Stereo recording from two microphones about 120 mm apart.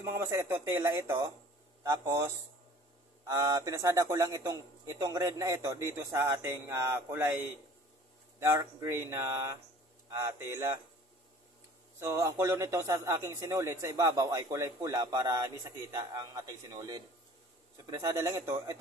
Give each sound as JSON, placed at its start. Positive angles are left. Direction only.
{"t": 0.0, "sound": "a man's voice", "side_deg": -25}
{"t": 3.3, "sound": "a man's voice", "side_deg": -25}
{"t": 8.4, "sound": "a man's voice", "side_deg": -20}
{"t": 12.0, "sound": "a man's voice", "side_deg": -25}